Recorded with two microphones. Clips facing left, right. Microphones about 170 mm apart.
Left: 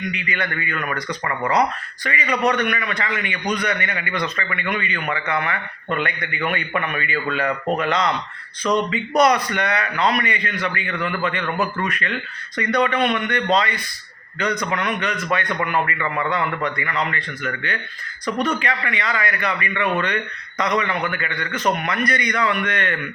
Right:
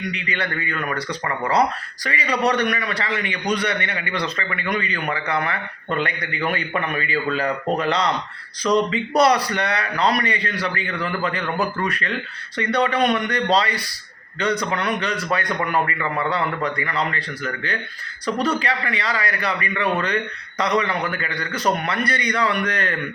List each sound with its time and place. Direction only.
0.1 s a man's voice: 30° right (ahead or behind)